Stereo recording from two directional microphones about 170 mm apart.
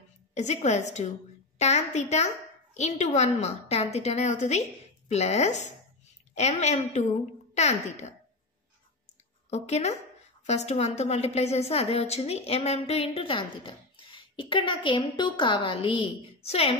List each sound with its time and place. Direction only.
0.3 s a woman's voice: 40° left (ahead or behind)
9.5 s a child's voice: 40° left (ahead or behind)